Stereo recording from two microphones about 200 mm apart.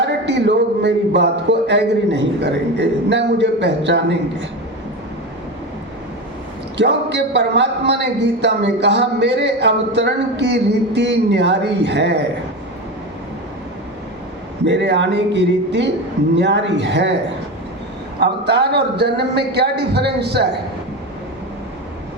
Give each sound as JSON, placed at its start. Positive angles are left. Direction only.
{"t": 0.0, "sound": "speech", "side_deg": -60}
{"t": 6.7, "sound": "speech", "side_deg": -60}
{"t": 14.6, "sound": "speech", "side_deg": -60}
{"t": 18.2, "sound": "speech", "side_deg": -55}